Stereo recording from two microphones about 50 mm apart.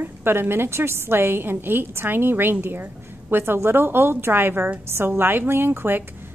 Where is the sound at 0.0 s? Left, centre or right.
Right.